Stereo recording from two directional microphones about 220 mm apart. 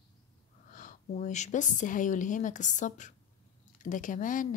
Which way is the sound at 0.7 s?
35° left (ahead or behind).